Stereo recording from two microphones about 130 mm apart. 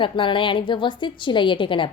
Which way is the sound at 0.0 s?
40° left (ahead or behind).